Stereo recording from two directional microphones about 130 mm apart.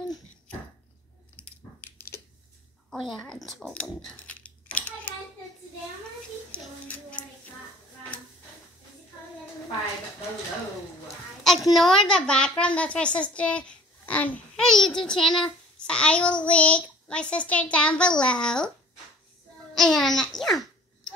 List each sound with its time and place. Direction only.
1.3 s dog: 10° left (ahead or behind)
2.9 s a sound: 5° left (ahead or behind)
6.9 s child singing: 10° left (ahead or behind)
11.4 s a woman's voice: centre (ahead or behind)
19.7 s babbling: 5° left (ahead or behind)